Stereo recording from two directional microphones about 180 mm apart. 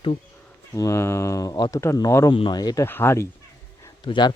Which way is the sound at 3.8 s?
25° left (ahead or behind).